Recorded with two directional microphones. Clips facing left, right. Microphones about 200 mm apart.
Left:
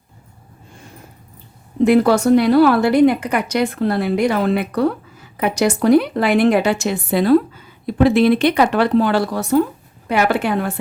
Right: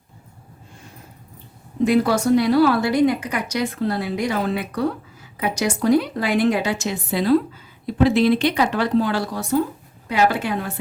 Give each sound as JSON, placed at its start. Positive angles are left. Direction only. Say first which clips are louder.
{"t": 1.8, "sound": "a woman's voice", "louder": "left 5 dB", "side_deg": 60}